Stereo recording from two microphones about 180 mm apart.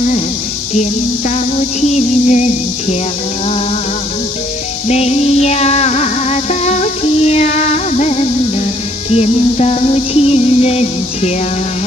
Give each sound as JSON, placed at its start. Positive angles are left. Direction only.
{"t": 2.0, "sound": "music", "side_deg": 40}
{"t": 4.8, "sound": "music", "side_deg": 35}